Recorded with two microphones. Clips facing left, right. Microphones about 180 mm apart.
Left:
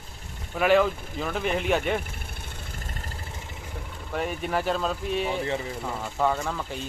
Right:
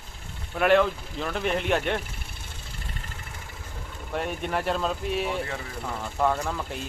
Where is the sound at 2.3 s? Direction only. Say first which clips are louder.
Left 3 dB; 45° left (ahead or behind).